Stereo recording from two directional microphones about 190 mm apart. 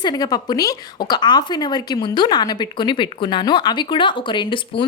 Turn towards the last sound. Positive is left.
turn(degrees=25)  # may be behind; listen again after turning